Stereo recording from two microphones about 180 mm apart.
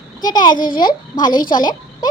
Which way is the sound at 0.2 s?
25° left (ahead or behind).